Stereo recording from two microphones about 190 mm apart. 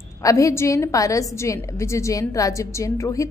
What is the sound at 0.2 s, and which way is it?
A woman's voice, 15° left (ahead or behind).